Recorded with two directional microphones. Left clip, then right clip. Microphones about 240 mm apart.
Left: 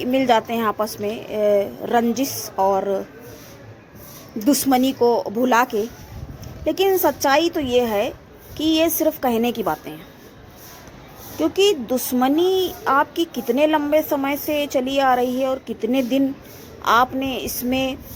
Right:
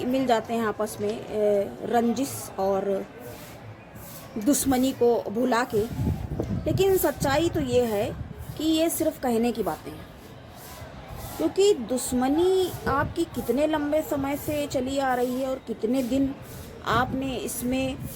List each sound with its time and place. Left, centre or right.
0.0 s a woman's voice: centre
4.4 s a woman's voice: centre
6.7 s a woman's voice: centre
11.5 s a woman's voice: centre